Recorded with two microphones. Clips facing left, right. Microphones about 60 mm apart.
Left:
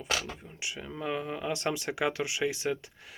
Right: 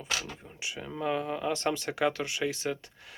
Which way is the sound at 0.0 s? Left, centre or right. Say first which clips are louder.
Left 2 dB; centre.